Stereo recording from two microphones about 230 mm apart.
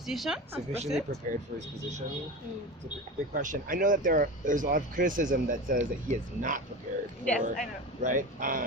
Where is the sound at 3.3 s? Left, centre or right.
Right.